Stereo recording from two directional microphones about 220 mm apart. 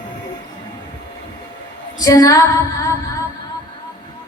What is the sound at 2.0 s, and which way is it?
Speech, 15° left (ahead or behind).